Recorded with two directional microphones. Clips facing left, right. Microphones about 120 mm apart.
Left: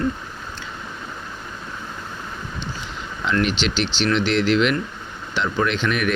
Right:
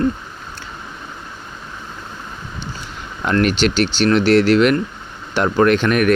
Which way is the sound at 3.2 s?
50° right (ahead or behind).